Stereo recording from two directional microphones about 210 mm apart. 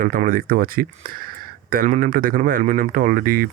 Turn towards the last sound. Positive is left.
turn(degrees=-40)  # may be behind; listen again after turning